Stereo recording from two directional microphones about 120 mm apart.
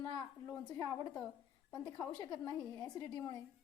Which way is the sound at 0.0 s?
35° left (ahead or behind).